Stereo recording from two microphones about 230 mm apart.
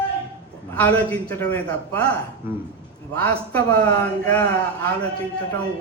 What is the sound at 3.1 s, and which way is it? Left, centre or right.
Speech, centre.